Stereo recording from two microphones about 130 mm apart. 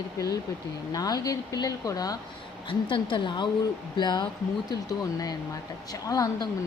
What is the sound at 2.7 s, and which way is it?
A woman's voice, 40° left (ahead or behind).